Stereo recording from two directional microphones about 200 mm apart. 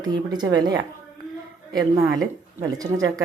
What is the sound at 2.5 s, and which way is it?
Speech, 20° right (ahead or behind).